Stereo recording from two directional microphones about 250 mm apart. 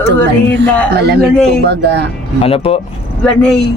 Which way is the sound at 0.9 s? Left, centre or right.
Right.